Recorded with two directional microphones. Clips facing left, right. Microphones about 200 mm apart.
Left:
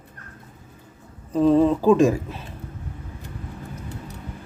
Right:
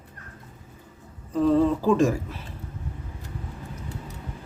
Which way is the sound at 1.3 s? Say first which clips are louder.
Left 3 dB; 20° left (ahead or behind).